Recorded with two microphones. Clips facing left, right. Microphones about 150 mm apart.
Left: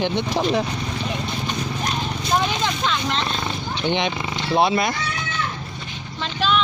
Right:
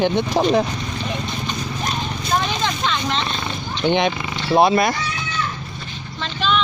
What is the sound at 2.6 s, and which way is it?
Vehicle, 5° left (ahead or behind).